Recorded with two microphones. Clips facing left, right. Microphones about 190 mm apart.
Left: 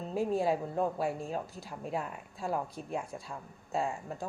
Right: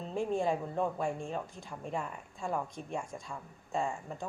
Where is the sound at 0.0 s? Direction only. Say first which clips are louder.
Left 2 dB; 5° left (ahead or behind).